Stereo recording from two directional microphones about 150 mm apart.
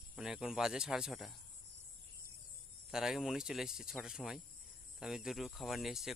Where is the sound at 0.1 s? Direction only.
5° right (ahead or behind).